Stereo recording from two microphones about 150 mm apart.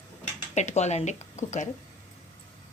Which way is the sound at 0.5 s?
50° left (ahead or behind).